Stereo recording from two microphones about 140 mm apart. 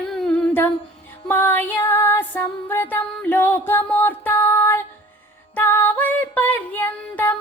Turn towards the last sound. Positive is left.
turn(degrees=15)  # may be behind; listen again after turning